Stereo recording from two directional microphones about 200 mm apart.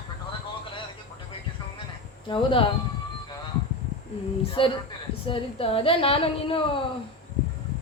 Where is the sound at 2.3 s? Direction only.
25° left (ahead or behind).